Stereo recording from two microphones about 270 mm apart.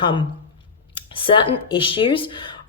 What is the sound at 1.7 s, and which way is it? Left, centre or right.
Speech, centre.